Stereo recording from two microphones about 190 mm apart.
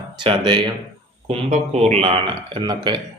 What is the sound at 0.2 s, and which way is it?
A man's voice, 25° right (ahead or behind).